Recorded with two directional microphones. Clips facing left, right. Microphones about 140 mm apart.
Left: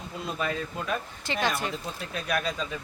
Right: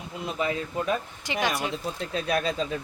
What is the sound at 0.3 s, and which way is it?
Speech, 20° right (ahead or behind).